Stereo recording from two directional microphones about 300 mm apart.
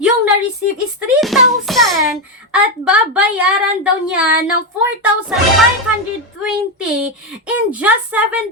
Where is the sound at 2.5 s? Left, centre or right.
Centre.